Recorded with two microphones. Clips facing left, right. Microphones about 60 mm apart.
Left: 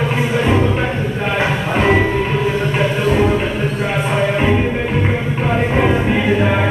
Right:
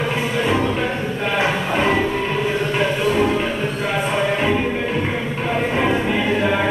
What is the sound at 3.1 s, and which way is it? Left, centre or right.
Music, centre.